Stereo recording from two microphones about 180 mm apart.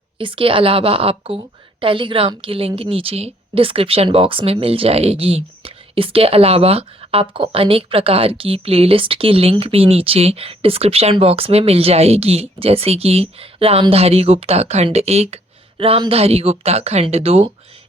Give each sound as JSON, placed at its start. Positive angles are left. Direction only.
{"t": 0.2, "sound": "a woman's voice", "side_deg": -30}